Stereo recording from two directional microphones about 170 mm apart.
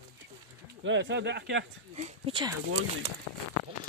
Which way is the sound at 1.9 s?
40° right (ahead or behind).